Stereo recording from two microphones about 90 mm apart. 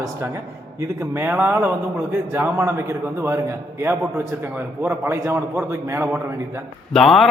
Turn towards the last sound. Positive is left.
turn(degrees=5)  # may be behind; listen again after turning